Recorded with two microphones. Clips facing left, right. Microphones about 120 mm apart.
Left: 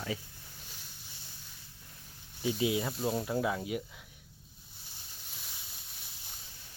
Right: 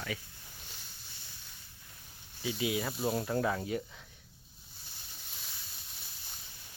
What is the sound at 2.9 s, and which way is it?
Speech, 5° right (ahead or behind).